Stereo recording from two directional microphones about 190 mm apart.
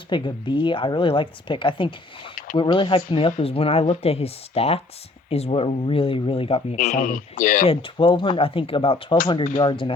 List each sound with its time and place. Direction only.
0.1 s speech: 25° left (ahead or behind); by 7.7 s 45° left (ahead or behind)
7.7 s speech: 25° left (ahead or behind)
9.4 s speech: 45° left (ahead or behind)
9.6 s speech: 25° left (ahead or behind)